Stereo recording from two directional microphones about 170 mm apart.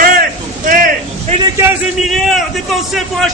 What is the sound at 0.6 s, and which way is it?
Speech, 50° right (ahead or behind).